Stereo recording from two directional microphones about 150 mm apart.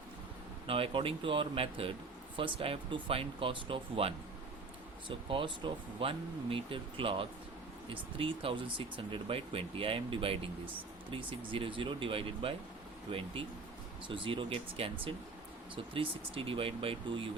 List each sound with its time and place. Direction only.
0.7 s speech: 35° right (ahead or behind)
14.1 s speech: 35° right (ahead or behind)